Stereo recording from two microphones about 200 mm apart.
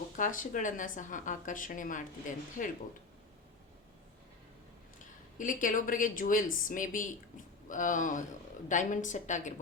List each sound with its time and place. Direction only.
0.2 s a woman's voice: 40° left (ahead or behind)
4.9 s a woman's voice: 40° left (ahead or behind)